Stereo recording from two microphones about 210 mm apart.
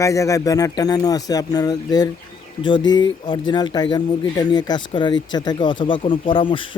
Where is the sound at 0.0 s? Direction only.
15° left (ahead or behind).